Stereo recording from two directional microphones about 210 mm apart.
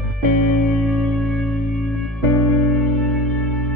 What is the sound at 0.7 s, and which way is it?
Music, centre (ahead or behind).